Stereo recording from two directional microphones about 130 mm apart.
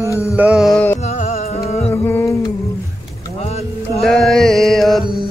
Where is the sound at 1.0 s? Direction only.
60° left (ahead or behind).